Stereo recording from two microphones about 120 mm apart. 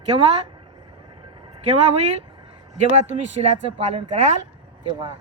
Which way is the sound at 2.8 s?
70° right (ahead or behind).